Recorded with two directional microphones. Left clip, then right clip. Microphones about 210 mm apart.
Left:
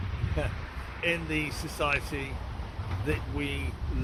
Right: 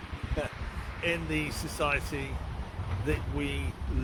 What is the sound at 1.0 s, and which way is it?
Speech, 5° right (ahead or behind).